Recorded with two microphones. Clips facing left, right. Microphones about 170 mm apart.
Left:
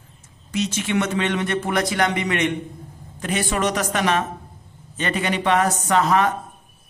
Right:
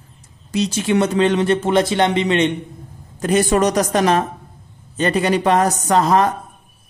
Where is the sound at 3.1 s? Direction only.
40° right (ahead or behind).